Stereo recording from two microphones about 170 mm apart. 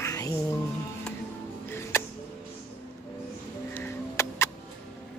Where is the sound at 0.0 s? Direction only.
20° left (ahead or behind).